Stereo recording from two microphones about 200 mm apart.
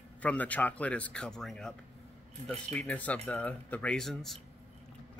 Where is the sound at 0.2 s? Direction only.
5° left (ahead or behind).